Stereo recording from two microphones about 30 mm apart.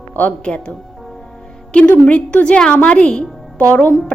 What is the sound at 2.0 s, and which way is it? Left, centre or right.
Speech, left.